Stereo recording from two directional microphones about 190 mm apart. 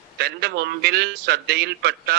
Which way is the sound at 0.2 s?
60° right (ahead or behind).